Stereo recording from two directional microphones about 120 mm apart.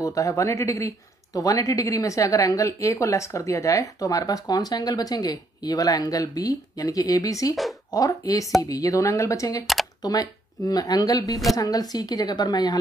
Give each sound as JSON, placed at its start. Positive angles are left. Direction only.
{"t": 0.0, "sound": "speech", "side_deg": 30}